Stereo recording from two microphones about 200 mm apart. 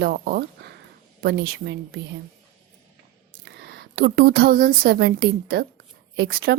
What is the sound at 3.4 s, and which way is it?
A woman's voice, 55° right (ahead or behind).